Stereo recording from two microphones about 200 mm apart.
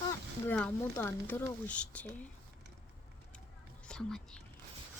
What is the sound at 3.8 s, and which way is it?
Speech, 5° left (ahead or behind).